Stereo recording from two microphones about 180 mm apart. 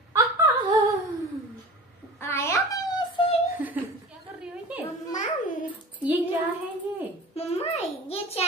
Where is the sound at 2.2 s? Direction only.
15° left (ahead or behind).